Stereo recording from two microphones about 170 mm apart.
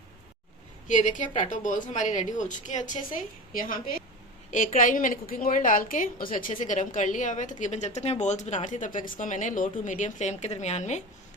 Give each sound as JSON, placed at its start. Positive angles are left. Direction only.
{"t": 0.9, "sound": "a woman's voice", "side_deg": 50}